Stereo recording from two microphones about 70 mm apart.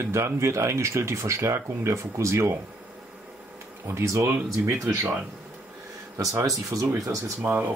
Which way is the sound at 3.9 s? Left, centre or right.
Right.